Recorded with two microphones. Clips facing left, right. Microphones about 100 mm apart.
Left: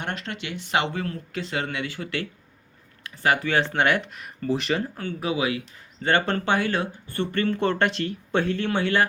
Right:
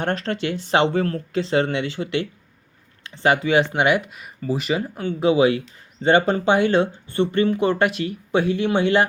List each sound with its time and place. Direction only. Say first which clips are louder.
0.0 s speech: right 8 dB; 35° right (ahead or behind); by 5.0 s 10° right (ahead or behind)
5.0 s speech: right 11 dB; 25° right (ahead or behind)
6.1 s speech: right 6 dB; 15° right (ahead or behind)